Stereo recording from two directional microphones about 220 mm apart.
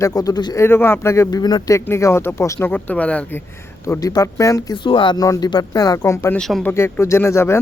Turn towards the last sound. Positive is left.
turn(degrees=10)  # may be behind; listen again after turning